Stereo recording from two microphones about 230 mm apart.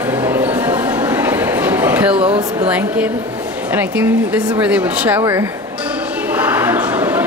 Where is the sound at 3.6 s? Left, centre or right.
Centre.